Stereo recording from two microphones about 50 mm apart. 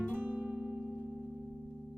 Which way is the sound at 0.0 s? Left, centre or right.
Right.